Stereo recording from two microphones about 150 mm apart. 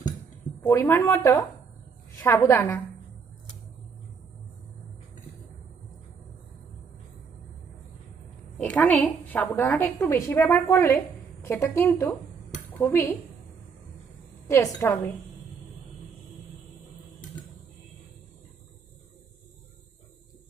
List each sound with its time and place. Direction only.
0.6 s a woman's voice: 20° left (ahead or behind)
8.5 s a woman's voice: 10° left (ahead or behind)
14.4 s a woman's voice: 20° left (ahead or behind)